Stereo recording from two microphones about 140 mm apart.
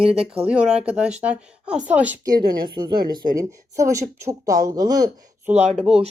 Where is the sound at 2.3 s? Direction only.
90° right.